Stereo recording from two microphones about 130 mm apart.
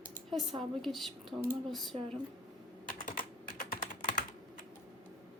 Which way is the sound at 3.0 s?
90° left.